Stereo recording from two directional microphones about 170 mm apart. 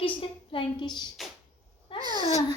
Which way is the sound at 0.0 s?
30° left (ahead or behind).